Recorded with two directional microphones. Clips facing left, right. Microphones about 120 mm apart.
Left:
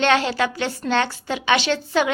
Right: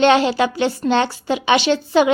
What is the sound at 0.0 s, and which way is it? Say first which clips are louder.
A woman's voice: right 5 dB; 20° right (ahead or behind).